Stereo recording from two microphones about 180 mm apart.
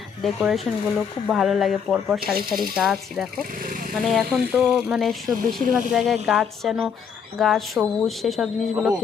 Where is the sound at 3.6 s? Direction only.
50° right (ahead or behind).